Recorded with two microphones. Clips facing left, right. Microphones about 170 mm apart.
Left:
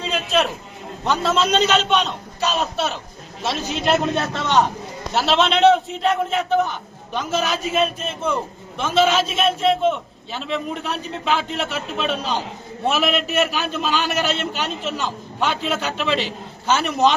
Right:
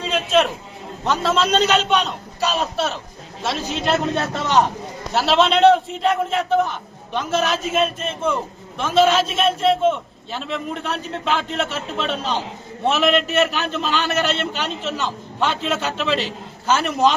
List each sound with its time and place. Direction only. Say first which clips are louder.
0.0 s a sound: right 3 dB; centre (ahead or behind)
1.0 s a man's voice: even; centre (ahead or behind)
3.8 s speech: left 1 dB; 15° left (ahead or behind)
4.4 s a man's voice: right 1 dB; centre (ahead or behind)